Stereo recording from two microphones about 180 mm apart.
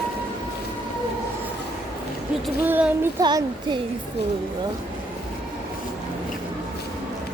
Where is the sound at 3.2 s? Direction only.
25° right (ahead or behind).